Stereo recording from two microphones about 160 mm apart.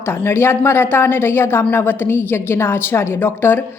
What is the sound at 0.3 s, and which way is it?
A woman's voice, 15° left (ahead or behind).